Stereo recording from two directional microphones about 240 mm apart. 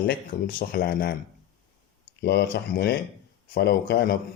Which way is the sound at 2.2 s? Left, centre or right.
Left.